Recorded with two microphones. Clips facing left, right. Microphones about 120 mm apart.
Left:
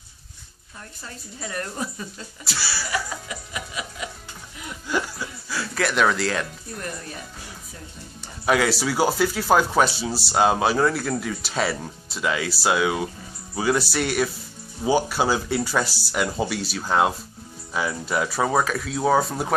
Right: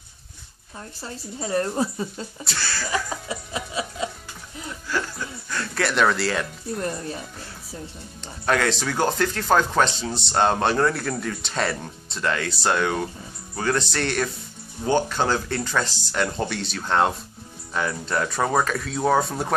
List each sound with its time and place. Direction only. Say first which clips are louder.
0.7 s speech: right 4 dB; 30° right (ahead or behind)
2.4 s speech: even; 5° left (ahead or behind)
3.3 s music: right 4 dB; 30° right (ahead or behind)
4.8 s chuckle: left 2 dB; 15° left (ahead or behind)
5.1 s music: even; 5° left (ahead or behind)
6.8 s speech: right 5 dB; 30° right (ahead or behind)
8.5 s speech: left 2 dB; 5° left (ahead or behind)